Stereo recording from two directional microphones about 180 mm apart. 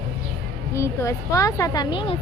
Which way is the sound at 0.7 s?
15° left (ahead or behind).